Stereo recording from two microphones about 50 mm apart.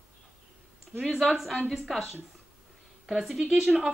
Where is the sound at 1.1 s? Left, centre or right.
Centre.